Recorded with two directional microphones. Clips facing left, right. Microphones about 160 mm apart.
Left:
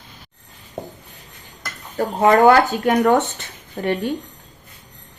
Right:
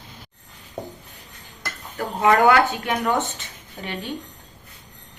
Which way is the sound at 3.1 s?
70° left (ahead or behind).